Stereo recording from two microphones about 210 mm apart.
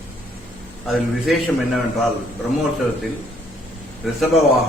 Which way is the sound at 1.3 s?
Centre (ahead or behind).